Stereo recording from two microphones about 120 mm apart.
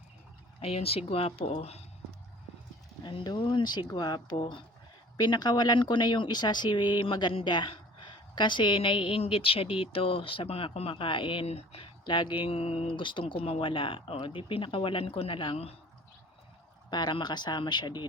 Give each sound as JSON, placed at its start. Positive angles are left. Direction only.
{"t": 0.6, "sound": "speech", "side_deg": 55}
{"t": 3.0, "sound": "a woman's voice", "side_deg": 40}
{"t": 16.9, "sound": "speech", "side_deg": 35}